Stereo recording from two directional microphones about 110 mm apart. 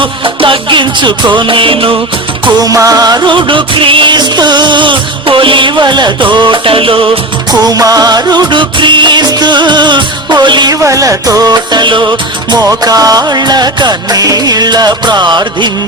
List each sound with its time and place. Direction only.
0.0 s music: 50° right (ahead or behind)
2.4 s music: 35° right (ahead or behind); by 7.1 s 55° right (ahead or behind)
7.7 s music: 35° right (ahead or behind)
10.8 s music: 30° right (ahead or behind)